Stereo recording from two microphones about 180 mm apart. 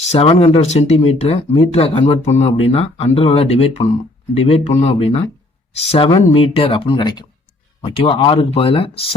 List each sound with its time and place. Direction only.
0.0 s speech: 35° left (ahead or behind)